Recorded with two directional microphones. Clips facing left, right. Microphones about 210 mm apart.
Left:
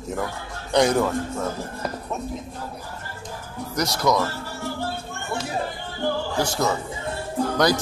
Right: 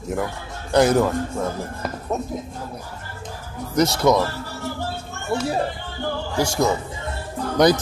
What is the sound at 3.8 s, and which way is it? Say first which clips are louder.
Speech: right 5 dB; 25° right (ahead or behind).